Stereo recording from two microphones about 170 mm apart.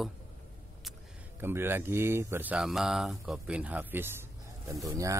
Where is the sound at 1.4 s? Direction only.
15° right (ahead or behind).